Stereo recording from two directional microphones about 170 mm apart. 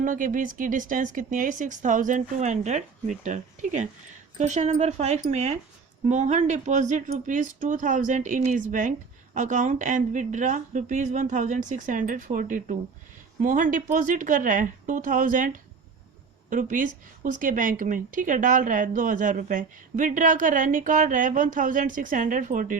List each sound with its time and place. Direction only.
0.0 s speech: 50° right (ahead or behind)